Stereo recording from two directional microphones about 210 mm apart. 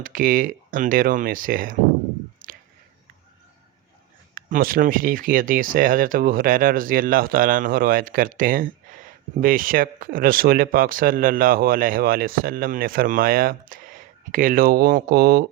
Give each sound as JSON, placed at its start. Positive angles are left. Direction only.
{"t": 0.0, "sound": "speech", "side_deg": -40}
{"t": 2.4, "sound": "a sound", "side_deg": -40}
{"t": 4.4, "sound": "speech", "side_deg": -40}